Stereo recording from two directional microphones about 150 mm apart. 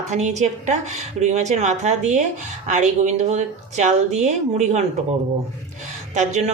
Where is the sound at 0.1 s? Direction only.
50° right (ahead or behind).